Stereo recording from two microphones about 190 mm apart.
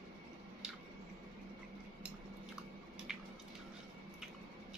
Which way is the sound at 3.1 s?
5° right (ahead or behind).